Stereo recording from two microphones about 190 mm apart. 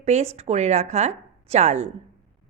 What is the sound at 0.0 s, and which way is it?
A woman's voice, 35° right (ahead or behind).